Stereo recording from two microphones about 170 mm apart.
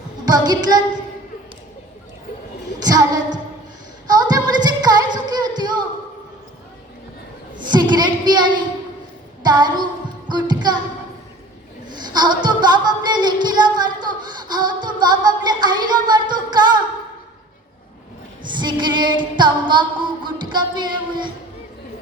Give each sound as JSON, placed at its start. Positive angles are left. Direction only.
{"t": 0.3, "sound": "a woman's voice", "side_deg": -25}
{"t": 2.7, "sound": "female singing", "side_deg": -20}
{"t": 4.0, "sound": "music", "side_deg": -25}
{"t": 7.7, "sound": "a sound", "side_deg": -25}
{"t": 10.2, "sound": "music", "side_deg": -25}
{"t": 11.9, "sound": "a sound", "side_deg": -25}
{"t": 18.4, "sound": "female singing", "side_deg": -25}